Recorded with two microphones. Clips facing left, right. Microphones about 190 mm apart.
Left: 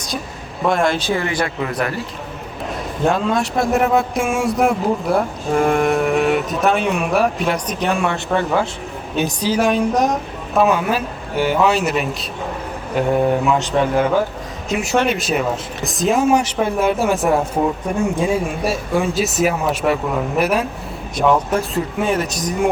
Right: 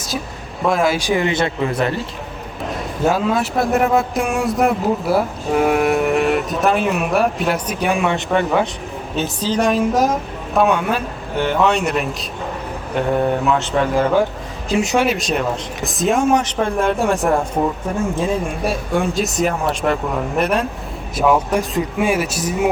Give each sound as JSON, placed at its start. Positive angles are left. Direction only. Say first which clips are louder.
{"t": 0.6, "sound": "speech", "louder": "even", "side_deg": 0}
{"t": 0.9, "sound": "speech", "louder": "right 2 dB", "side_deg": -15}
{"t": 3.0, "sound": "speech", "louder": "even", "side_deg": -5}
{"t": 9.1, "sound": "speech", "louder": "left 2 dB", "side_deg": 15}
{"t": 9.6, "sound": "speech", "louder": "right 1 dB", "side_deg": 0}
{"t": 14.7, "sound": "speech", "louder": "right 4 dB", "side_deg": -30}
{"t": 15.0, "sound": "speech", "louder": "even", "side_deg": 0}